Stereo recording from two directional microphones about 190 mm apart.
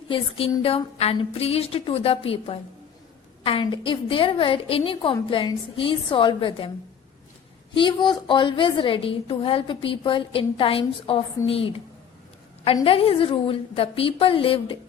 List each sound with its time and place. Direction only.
0.1 s a woman's voice: 30° left (ahead or behind)
7.7 s a woman's voice: 25° left (ahead or behind)